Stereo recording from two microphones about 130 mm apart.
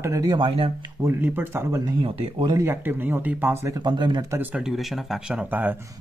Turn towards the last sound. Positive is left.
turn(degrees=-15)  # may be behind; listen again after turning